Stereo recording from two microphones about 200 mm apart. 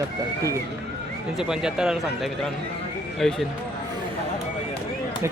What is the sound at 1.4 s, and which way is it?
Speech, 5° right (ahead or behind).